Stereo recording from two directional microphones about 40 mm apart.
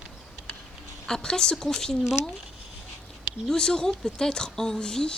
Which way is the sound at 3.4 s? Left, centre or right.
Centre.